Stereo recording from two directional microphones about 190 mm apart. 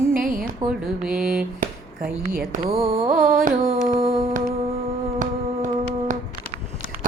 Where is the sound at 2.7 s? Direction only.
35° right (ahead or behind).